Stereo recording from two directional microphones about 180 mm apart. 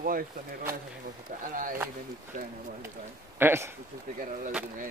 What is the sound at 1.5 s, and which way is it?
Speech, 50° right (ahead or behind).